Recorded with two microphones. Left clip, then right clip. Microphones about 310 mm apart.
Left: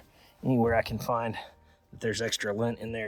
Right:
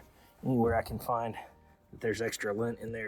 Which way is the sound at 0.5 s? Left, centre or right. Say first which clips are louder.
Left 3 dB; left.